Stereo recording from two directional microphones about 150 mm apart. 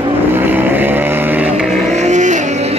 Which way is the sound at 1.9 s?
50° right (ahead or behind).